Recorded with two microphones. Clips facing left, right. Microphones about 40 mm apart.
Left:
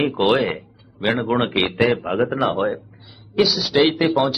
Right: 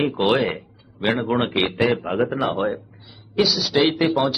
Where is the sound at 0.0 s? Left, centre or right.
Centre.